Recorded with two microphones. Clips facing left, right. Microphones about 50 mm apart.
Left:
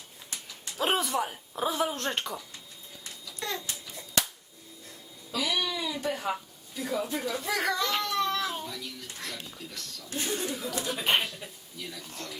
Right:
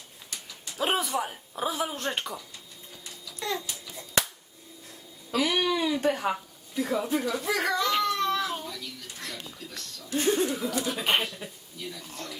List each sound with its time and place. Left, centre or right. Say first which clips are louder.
0.8 s speech: even; centre
3.4 s babbling: right 3 dB; centre
5.3 s a sound: right 5 dB; right
6.7 s speech: right 4 dB; centre
7.2 s baby cry: right 2 dB; centre
10.1 s speech: right 8 dB; right
10.4 s speech: right 6 dB; centre
10.8 s speech: left 2 dB; centre